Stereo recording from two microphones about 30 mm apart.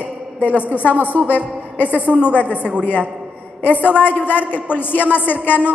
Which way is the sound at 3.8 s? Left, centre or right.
Left.